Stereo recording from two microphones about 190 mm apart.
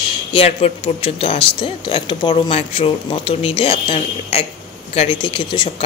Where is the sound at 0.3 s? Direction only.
30° left (ahead or behind).